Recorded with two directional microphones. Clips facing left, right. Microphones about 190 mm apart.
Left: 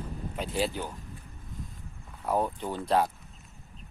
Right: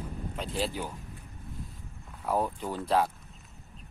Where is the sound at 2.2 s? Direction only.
Centre (ahead or behind).